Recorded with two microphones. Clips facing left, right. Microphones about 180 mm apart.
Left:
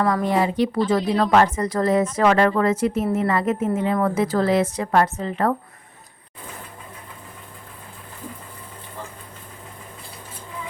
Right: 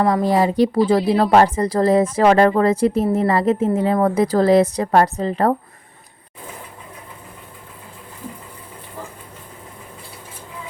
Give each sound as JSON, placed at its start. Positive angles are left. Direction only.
{"t": 0.0, "sound": "speech", "side_deg": -35}